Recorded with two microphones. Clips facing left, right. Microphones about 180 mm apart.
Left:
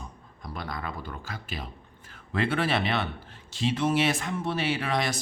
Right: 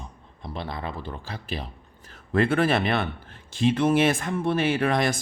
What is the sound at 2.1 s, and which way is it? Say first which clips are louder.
Speech: right 6 dB; 50° right (ahead or behind).